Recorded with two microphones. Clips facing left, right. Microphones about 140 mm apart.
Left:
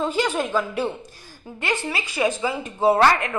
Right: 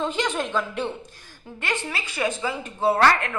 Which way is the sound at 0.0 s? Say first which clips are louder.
Left 3 dB; 5° left (ahead or behind).